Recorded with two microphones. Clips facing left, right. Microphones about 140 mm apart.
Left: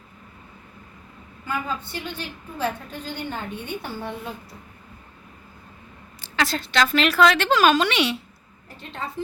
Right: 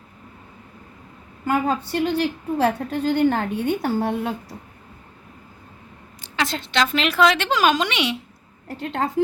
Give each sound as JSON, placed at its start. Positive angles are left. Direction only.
{"t": 1.6, "sound": "a woman's voice", "side_deg": -65}
{"t": 3.7, "sound": "a woman's voice", "side_deg": -45}
{"t": 4.0, "sound": "speech", "side_deg": -75}
{"t": 6.2, "sound": "a woman's voice", "side_deg": -20}
{"t": 8.6, "sound": "a woman's voice", "side_deg": -90}